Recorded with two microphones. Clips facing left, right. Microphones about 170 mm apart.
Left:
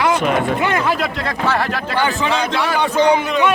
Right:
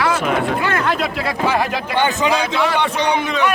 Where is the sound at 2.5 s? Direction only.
Centre (ahead or behind).